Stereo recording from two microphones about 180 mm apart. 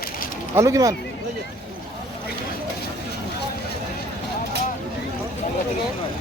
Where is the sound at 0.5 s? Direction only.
15° right (ahead or behind).